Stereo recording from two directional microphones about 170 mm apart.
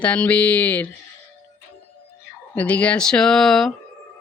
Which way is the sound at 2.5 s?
10° left (ahead or behind).